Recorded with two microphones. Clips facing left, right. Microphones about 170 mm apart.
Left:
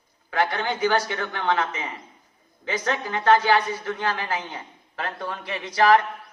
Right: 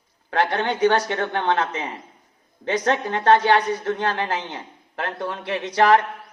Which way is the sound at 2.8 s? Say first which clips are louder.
Right 4 dB; 60° right (ahead or behind).